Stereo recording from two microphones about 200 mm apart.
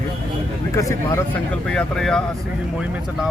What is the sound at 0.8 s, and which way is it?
Speech, 15° left (ahead or behind).